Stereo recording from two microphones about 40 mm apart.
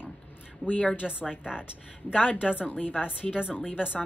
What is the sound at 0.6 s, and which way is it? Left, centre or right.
Speech, left.